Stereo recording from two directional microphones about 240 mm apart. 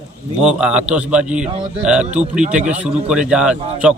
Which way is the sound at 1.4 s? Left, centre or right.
Right.